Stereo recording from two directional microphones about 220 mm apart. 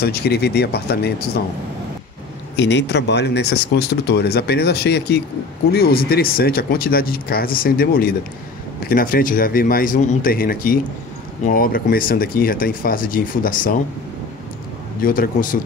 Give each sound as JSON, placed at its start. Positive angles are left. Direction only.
{"t": 0.0, "sound": "speech", "side_deg": 45}
{"t": 2.5, "sound": "speech", "side_deg": 50}
{"t": 15.0, "sound": "speech", "side_deg": 40}